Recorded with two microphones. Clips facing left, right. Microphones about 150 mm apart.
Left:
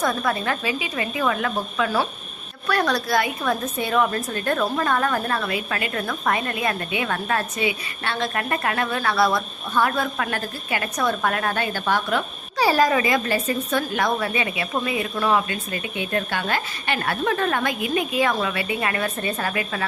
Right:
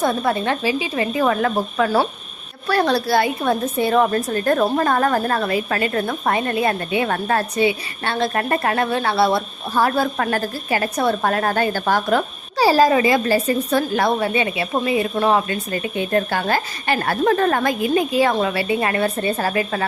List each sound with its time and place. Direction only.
0.0 s a woman's voice: 30° right (ahead or behind)